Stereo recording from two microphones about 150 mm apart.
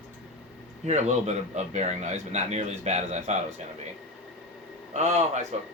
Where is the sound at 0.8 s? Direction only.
50° right (ahead or behind).